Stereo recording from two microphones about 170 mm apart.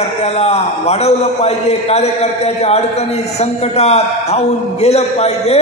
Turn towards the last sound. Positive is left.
turn(degrees=40)  # may be behind; listen again after turning